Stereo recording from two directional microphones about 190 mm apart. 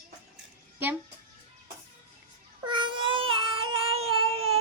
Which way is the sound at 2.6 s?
25° right (ahead or behind).